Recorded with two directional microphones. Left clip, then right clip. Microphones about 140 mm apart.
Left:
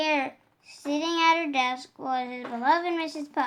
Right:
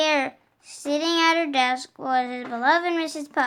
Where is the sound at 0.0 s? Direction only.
30° right (ahead or behind).